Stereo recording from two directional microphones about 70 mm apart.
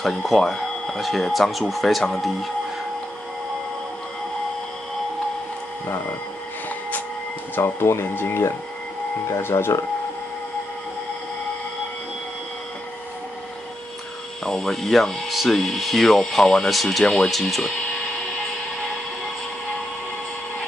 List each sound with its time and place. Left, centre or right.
0.0 s speech: centre
5.9 s speech: left
7.5 s speech: left
14.4 s speech: centre